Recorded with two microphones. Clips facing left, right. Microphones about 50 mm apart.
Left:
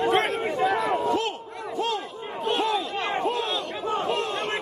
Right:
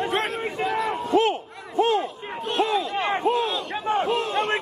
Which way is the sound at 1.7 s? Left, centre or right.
Right.